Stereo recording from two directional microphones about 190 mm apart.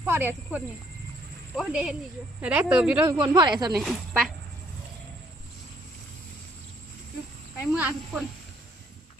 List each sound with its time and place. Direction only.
0.0 s speech: 10° right (ahead or behind)
3.3 s speech: 25° right (ahead or behind)
3.7 s speech: centre (ahead or behind)
7.7 s speech: 5° right (ahead or behind)